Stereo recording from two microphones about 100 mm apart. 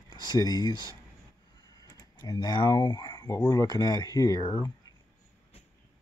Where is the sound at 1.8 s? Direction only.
35° left (ahead or behind).